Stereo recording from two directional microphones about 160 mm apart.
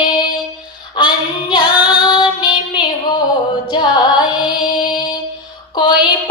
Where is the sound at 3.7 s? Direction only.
25° left (ahead or behind).